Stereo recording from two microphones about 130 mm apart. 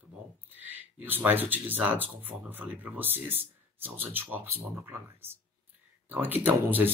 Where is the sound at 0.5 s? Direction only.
15° right (ahead or behind).